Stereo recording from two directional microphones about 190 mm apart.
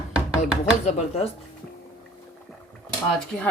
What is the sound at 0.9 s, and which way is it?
Speech, 35° left (ahead or behind).